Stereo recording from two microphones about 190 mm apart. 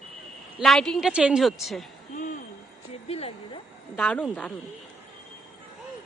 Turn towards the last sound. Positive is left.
turn(degrees=5)  # may be behind; listen again after turning